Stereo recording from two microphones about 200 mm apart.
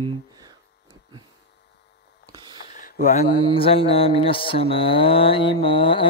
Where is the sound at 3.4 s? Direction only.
25° left (ahead or behind).